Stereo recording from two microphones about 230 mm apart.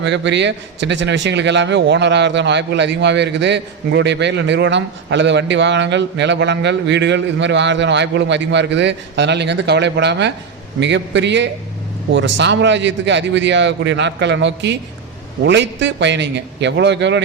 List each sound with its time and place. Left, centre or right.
0.0 s a man's voice: right